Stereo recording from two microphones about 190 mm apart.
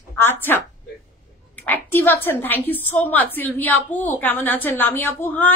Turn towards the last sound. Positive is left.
turn(degrees=10)  # may be behind; listen again after turning